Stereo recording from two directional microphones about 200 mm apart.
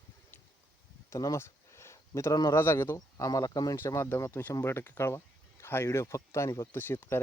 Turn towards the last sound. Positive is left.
turn(degrees=10)  # may be behind; listen again after turning